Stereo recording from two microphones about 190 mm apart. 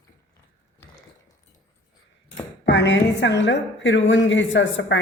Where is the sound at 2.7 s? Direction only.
70° left (ahead or behind).